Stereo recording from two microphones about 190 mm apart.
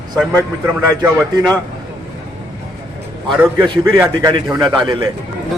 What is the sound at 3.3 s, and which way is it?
A man's voice, 10° right (ahead or behind).